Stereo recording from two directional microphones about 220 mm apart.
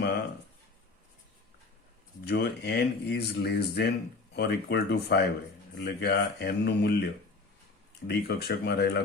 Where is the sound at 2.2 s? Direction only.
45° left (ahead or behind).